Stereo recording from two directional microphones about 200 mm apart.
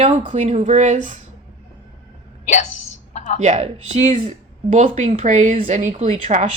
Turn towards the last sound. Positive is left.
turn(degrees=-35)  # may be behind; listen again after turning